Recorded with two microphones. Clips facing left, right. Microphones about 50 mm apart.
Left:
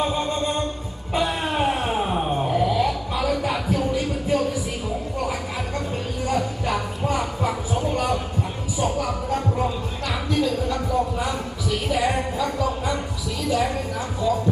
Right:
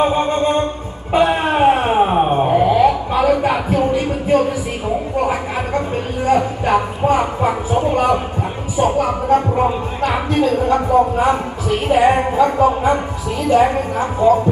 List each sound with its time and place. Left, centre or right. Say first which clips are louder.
0.0 s music: right 8 dB; right
1.1 s a sound: right 9 dB; right
13.4 s a woman's voice: right 10 dB; right